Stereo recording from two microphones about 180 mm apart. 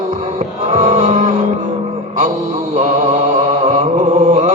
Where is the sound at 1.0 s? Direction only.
45° right (ahead or behind).